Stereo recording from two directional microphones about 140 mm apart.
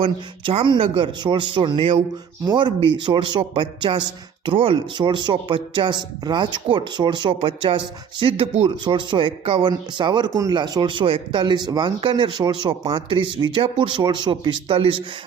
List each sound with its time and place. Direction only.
0.0 s speech: 40° right (ahead or behind)
8.7 s speech: 35° right (ahead or behind)